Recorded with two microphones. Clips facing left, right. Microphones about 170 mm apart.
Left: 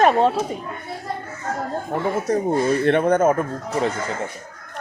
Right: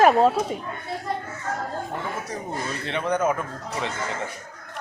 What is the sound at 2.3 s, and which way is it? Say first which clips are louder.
Speech: left 12 dB; 55° left (ahead or behind).